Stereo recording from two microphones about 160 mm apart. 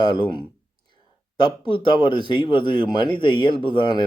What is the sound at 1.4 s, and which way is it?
Speech, 30° left (ahead or behind).